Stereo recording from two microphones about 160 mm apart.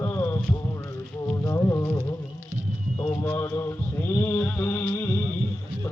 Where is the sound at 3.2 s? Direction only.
20° left (ahead or behind).